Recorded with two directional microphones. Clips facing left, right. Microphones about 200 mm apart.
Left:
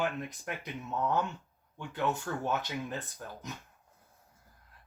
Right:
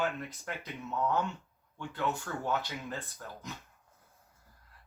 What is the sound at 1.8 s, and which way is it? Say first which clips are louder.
Speech: left 2 dB; 15° left (ahead or behind).